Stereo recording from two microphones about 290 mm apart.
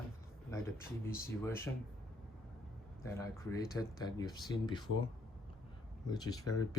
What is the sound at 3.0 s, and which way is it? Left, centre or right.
Speech, centre.